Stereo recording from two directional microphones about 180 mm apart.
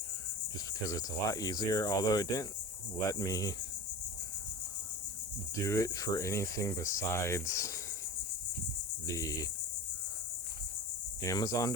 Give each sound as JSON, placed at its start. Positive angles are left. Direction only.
{"t": 0.9, "sound": "speech", "side_deg": 20}
{"t": 5.5, "sound": "speech", "side_deg": 20}
{"t": 9.0, "sound": "speech", "side_deg": 20}
{"t": 11.2, "sound": "speech", "side_deg": 20}